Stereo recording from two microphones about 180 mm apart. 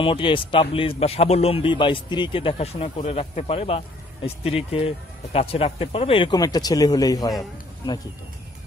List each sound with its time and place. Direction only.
0.0 s a man's voice: 30° left (ahead or behind)